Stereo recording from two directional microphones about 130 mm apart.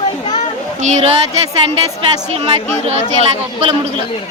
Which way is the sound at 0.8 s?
60° right (ahead or behind).